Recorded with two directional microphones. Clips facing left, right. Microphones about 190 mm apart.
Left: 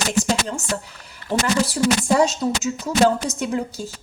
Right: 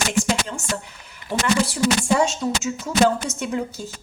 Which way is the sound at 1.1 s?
35° left (ahead or behind).